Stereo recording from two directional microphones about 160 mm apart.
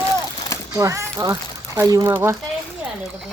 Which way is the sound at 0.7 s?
20° right (ahead or behind).